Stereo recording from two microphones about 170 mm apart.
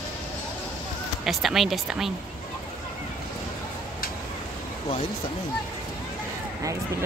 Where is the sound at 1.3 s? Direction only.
Centre (ahead or behind).